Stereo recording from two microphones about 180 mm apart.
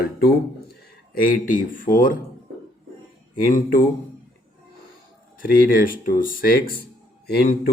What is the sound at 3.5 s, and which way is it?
Speech, 50° left (ahead or behind).